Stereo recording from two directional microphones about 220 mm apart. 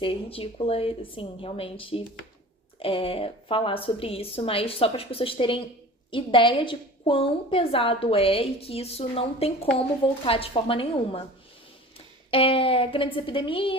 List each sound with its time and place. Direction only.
0.0 s a woman's voice: 25° left (ahead or behind)
12.3 s a woman's voice: 25° left (ahead or behind)